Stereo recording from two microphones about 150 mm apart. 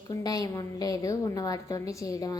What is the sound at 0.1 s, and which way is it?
A woman's voice, 25° left (ahead or behind).